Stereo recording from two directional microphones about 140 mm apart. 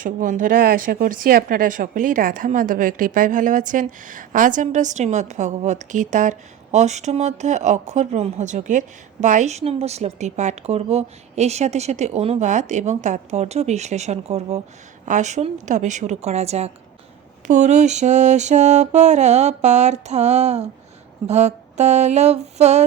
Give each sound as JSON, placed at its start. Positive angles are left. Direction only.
{"t": 0.0, "sound": "a woman's voice", "side_deg": -70}
{"t": 15.0, "sound": "mantra", "side_deg": -60}
{"t": 17.4, "sound": "mantra", "side_deg": -60}
{"t": 21.2, "sound": "a woman's voice", "side_deg": -55}